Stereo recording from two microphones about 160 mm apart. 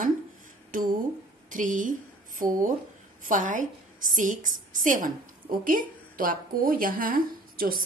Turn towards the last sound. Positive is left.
turn(degrees=-65)  # may be behind; listen again after turning